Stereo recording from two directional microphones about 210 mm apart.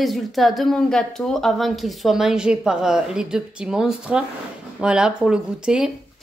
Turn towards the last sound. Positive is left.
turn(degrees=-5)  # may be behind; listen again after turning